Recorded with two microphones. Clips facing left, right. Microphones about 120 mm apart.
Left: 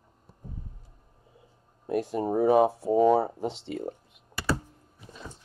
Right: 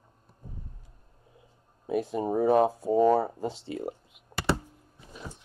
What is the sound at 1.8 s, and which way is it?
Speech, centre (ahead or behind).